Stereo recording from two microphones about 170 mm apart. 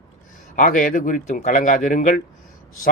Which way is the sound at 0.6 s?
50° left (ahead or behind).